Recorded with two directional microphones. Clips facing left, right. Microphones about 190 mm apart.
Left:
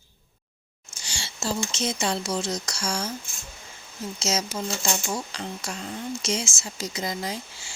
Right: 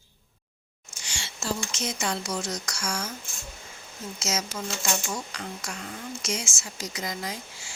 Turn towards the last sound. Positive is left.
turn(degrees=30)  # may be behind; listen again after turning